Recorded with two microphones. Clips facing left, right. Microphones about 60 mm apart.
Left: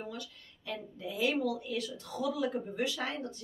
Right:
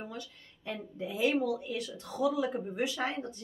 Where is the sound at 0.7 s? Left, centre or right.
Right.